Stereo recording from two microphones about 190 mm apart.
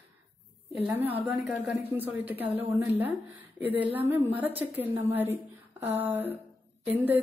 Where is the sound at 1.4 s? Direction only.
10° right (ahead or behind).